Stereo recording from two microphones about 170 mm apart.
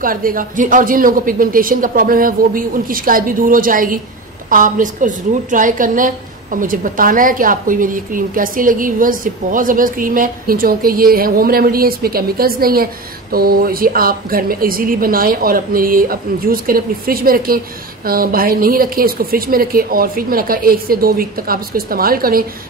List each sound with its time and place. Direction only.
0.0 s a woman's voice: 55° right (ahead or behind)